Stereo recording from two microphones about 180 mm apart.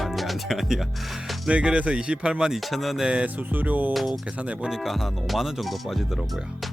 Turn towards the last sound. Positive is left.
turn(degrees=0)  # may be behind; listen again after turning